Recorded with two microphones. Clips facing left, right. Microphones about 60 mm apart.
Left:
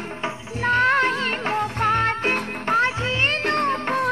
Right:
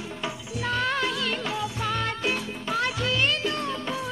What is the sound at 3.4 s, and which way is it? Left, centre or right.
Music, left.